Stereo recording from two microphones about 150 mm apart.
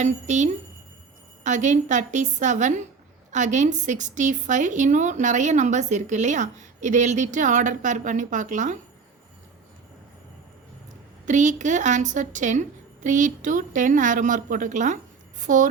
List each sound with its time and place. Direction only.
0.0 s a woman's voice: 50° right (ahead or behind)
11.3 s a woman's voice: 55° right (ahead or behind)